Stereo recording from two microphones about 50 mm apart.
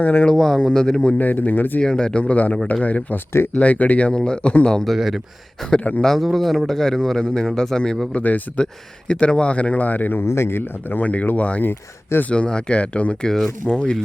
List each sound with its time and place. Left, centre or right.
0.0 s speech: left
0.3 s speech: centre
1.2 s speech: left
1.8 s speech: centre
4.9 s speech: centre
5.7 s speech: left
6.1 s speech: centre
8.1 s speech: left
8.6 s speech: centre; by 10.2 s left
10.2 s speech: left
10.8 s speech: left
13.2 s speech: centre